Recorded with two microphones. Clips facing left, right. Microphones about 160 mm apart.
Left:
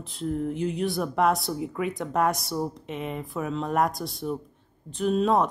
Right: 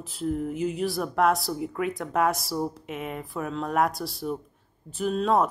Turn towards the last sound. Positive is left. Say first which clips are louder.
# left 1 dB
turn(degrees=0)  # may be behind; listen again after turning